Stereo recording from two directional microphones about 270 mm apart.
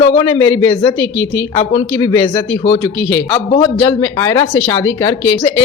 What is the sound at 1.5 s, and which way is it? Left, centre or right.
A woman's voice, centre.